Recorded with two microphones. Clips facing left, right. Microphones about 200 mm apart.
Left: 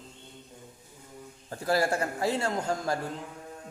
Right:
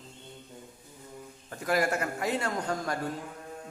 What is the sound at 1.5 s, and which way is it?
A man's voice, 30° left (ahead or behind).